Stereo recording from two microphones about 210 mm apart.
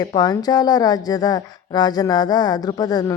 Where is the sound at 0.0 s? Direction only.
20° left (ahead or behind).